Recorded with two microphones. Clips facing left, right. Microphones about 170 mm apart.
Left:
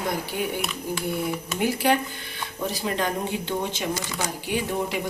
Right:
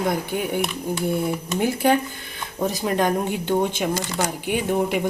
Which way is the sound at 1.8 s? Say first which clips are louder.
Right 3 dB; 50° right (ahead or behind).